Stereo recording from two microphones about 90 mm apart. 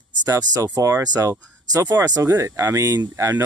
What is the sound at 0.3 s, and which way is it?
Speech, 35° right (ahead or behind).